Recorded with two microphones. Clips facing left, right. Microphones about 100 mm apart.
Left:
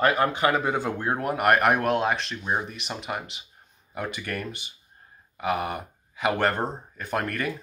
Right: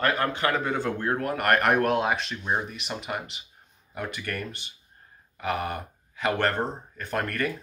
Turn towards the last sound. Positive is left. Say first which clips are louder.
# even
turn(degrees=5)  # may be behind; listen again after turning